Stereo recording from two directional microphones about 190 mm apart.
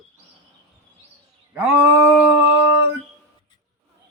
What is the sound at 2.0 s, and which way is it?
Howl, 5° right (ahead or behind).